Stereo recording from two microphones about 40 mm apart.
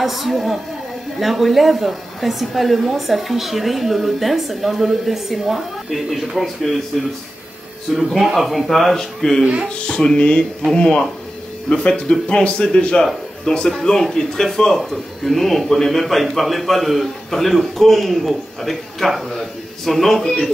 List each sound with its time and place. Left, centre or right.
0.0 s speech: centre
8.2 s speech: centre
9.4 s speech: right
9.8 s speech: left